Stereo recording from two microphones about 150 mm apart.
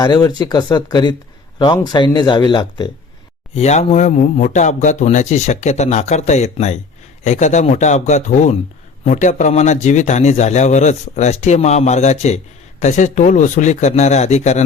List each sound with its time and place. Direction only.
0.0 s speech: 25° left (ahead or behind)
3.5 s a man's voice: 45° left (ahead or behind)